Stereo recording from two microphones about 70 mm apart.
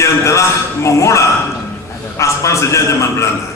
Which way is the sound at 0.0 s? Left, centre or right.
Left.